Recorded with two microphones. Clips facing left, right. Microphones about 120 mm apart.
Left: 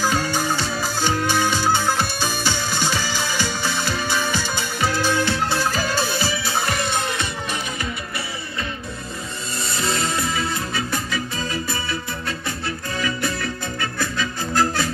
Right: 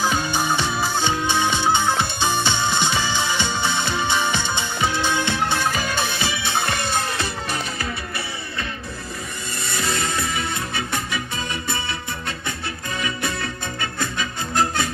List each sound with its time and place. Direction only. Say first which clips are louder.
0.0 s music: even; 20° right (ahead or behind)
5.7 s music: left 2 dB; 35° left (ahead or behind)
6.7 s music: left 1 dB; 30° right (ahead or behind)
9.6 s music: left 1 dB; 30° left (ahead or behind)
13.0 s music: left 2 dB; 25° right (ahead or behind)